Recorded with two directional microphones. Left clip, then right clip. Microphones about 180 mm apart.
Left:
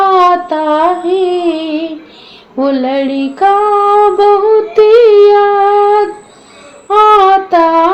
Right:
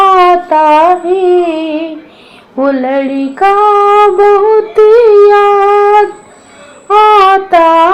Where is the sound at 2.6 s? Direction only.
30° right (ahead or behind).